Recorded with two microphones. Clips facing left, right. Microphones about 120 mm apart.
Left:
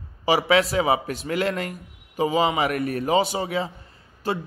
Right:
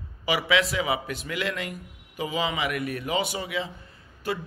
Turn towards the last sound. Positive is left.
turn(degrees=30)  # may be behind; listen again after turning